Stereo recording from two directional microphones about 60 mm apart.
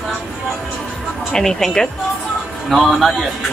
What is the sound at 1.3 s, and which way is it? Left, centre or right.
Speech, centre.